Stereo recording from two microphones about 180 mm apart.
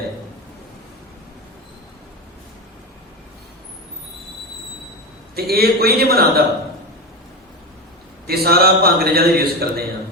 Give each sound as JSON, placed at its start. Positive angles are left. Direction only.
{"t": 5.3, "sound": "a man's voice", "side_deg": -60}
{"t": 8.3, "sound": "a man's voice", "side_deg": -60}